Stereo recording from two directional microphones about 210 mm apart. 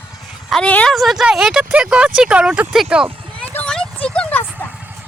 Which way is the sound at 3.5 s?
5° left (ahead or behind).